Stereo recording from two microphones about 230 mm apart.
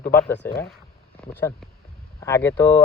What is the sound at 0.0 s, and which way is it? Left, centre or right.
Speech, left.